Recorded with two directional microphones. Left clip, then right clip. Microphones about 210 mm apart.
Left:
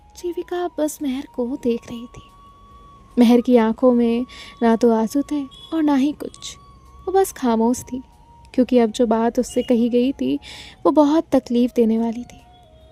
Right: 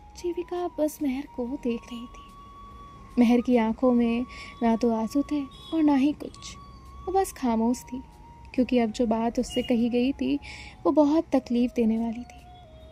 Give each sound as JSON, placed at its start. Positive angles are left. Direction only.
{"t": 0.3, "sound": "speech", "side_deg": 50}
{"t": 3.2, "sound": "speech", "side_deg": 55}